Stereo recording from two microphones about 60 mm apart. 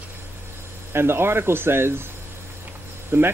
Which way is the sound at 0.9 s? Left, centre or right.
Right.